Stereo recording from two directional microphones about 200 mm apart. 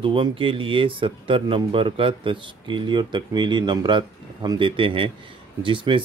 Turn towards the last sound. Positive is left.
turn(degrees=-25)  # may be behind; listen again after turning